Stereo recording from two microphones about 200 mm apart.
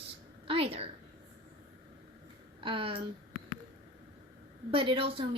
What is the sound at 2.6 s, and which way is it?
Speech, 25° right (ahead or behind).